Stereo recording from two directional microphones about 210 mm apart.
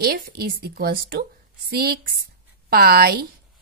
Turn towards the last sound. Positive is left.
turn(degrees=-45)  # may be behind; listen again after turning